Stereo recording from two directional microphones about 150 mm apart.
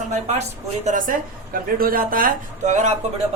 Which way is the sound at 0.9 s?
60° right (ahead or behind).